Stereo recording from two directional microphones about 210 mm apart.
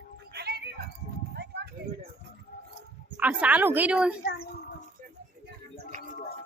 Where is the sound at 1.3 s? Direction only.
50° right (ahead or behind).